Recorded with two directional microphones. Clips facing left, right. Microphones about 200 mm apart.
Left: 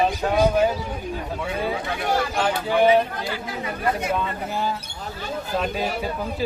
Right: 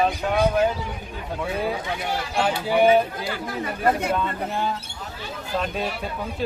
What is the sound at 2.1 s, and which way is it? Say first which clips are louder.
Speech: left 1 dB; 50° left (ahead or behind).